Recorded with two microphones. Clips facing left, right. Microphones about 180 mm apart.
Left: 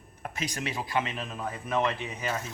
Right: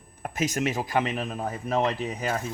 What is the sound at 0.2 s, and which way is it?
Speech, 45° right (ahead or behind).